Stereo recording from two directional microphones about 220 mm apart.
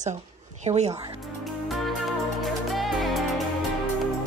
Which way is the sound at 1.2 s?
Centre (ahead or behind).